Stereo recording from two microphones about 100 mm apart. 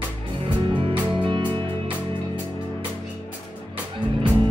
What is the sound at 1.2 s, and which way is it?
Music, 50° right (ahead or behind).